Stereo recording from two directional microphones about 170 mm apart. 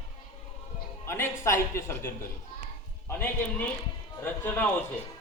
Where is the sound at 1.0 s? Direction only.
15° left (ahead or behind).